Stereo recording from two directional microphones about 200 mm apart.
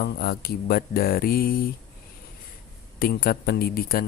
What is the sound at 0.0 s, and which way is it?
Speech, 50° left (ahead or behind).